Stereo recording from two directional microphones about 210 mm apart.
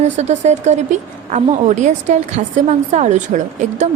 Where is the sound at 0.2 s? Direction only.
35° right (ahead or behind).